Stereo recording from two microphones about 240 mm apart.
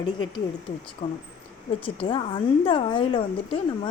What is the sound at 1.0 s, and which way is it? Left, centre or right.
A woman's voice, left.